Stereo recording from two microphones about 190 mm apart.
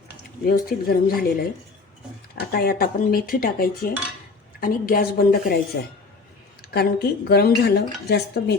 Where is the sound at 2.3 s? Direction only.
50° left (ahead or behind).